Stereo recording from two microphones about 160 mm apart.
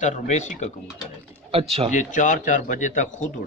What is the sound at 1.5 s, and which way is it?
Speech, 40° right (ahead or behind).